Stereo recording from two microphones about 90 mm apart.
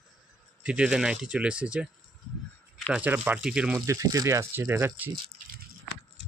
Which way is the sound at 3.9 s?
40° right (ahead or behind).